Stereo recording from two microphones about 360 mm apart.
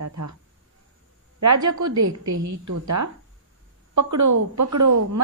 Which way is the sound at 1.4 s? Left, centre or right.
Right.